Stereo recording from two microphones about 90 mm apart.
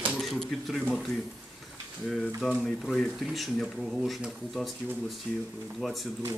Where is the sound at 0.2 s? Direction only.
Centre (ahead or behind).